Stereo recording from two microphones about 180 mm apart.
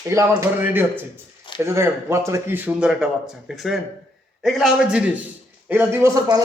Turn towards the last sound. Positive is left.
turn(degrees=-20)  # may be behind; listen again after turning